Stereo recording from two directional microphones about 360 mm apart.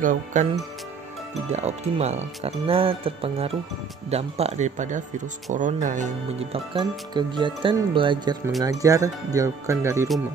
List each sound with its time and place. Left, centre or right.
0.0 s speech: right
1.5 s speech: centre